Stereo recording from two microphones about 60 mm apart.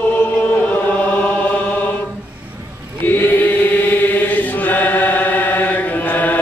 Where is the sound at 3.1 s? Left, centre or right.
Left.